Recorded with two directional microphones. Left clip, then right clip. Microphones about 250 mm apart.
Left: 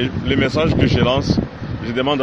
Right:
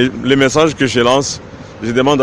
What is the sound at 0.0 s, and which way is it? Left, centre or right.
A man's voice, right.